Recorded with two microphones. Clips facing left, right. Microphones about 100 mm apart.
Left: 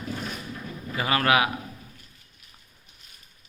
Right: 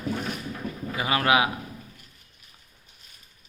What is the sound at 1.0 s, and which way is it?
Speech, 20° right (ahead or behind).